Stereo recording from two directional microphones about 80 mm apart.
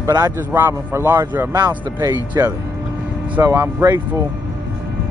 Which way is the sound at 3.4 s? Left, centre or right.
Right.